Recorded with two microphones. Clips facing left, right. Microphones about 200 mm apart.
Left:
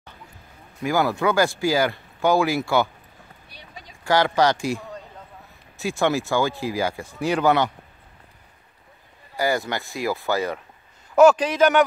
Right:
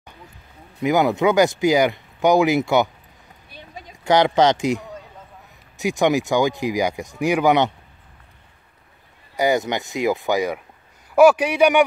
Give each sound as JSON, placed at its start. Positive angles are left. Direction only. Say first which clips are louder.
{"t": 0.8, "sound": "speech", "louder": "right 4 dB", "side_deg": -20}
{"t": 3.4, "sound": "a sound", "louder": "right 6 dB", "side_deg": -50}
{"t": 4.0, "sound": "speech", "louder": "right 3 dB", "side_deg": -20}
{"t": 9.4, "sound": "speech", "louder": "right 4 dB", "side_deg": -20}